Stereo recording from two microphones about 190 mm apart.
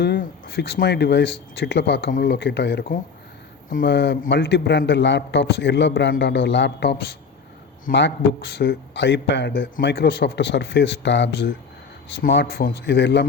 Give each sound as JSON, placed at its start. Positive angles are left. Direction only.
{"t": 0.0, "sound": "speech", "side_deg": 55}
{"t": 2.0, "sound": "a man's voice", "side_deg": 50}
{"t": 3.8, "sound": "a man's voice", "side_deg": 65}
{"t": 7.9, "sound": "a man's voice", "side_deg": 65}
{"t": 9.8, "sound": "a man's voice", "side_deg": 60}